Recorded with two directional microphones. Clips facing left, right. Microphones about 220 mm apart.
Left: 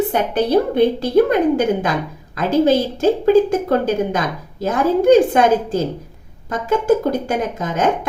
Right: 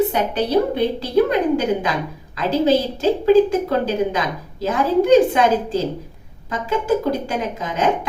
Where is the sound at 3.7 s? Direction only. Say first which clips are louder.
Left 2 dB; 50° left (ahead or behind).